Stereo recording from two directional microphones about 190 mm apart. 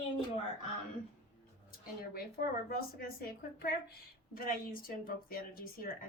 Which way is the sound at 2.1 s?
50° left (ahead or behind).